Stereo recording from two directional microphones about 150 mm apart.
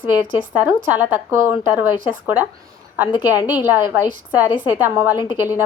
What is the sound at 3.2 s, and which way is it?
Speech, 10° right (ahead or behind).